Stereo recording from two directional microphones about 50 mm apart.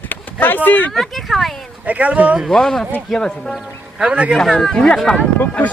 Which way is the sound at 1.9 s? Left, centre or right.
Right.